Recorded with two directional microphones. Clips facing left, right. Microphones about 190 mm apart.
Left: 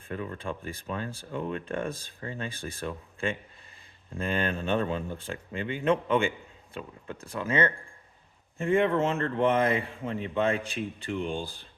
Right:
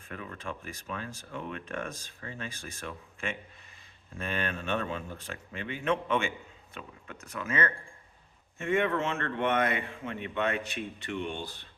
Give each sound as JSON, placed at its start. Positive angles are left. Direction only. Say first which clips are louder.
{"t": 0.1, "sound": "speech", "louder": "left 5 dB", "side_deg": 30}